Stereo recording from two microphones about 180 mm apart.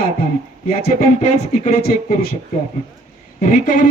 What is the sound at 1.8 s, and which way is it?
Speech, 55° left (ahead or behind).